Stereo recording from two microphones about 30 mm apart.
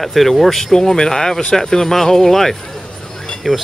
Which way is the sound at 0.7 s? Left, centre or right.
Left.